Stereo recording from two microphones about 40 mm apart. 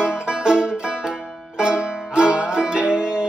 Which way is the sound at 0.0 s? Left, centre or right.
Right.